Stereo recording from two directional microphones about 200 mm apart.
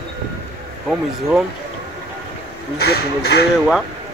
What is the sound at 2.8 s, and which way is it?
Speech, 55° left (ahead or behind).